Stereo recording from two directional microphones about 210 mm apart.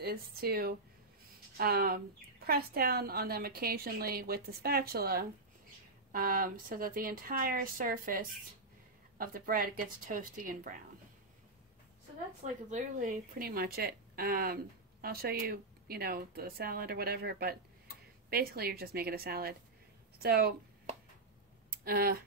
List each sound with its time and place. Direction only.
0.0 s speech: 45° right (ahead or behind)
12.4 s a woman's voice: 35° right (ahead or behind)
21.8 s speech: 45° right (ahead or behind)